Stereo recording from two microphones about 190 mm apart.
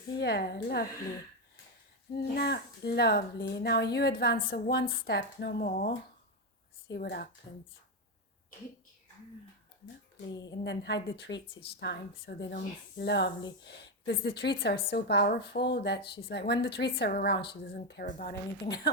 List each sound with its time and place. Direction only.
0.2 s a woman's voice: 55° left (ahead or behind)
2.1 s a woman's voice: 55° left (ahead or behind)
6.9 s a woman's voice: 55° left (ahead or behind)
10.6 s a woman's voice: 65° left (ahead or behind)